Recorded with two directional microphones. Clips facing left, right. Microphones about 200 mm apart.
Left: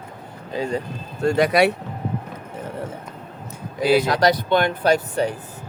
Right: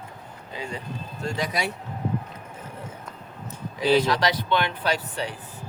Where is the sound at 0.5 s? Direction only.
40° left (ahead or behind).